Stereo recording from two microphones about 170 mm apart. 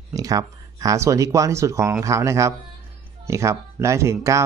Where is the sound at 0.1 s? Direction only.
20° right (ahead or behind).